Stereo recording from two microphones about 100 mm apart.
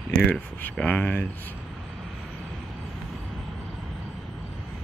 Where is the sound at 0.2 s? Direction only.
15° left (ahead or behind).